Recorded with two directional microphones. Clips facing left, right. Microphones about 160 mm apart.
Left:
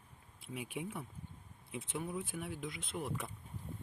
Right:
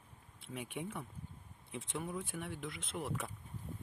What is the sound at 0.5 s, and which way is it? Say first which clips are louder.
Speech: even; 5° left (ahead or behind).